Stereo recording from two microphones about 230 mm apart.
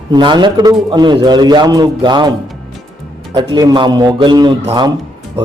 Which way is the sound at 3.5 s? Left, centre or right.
Centre.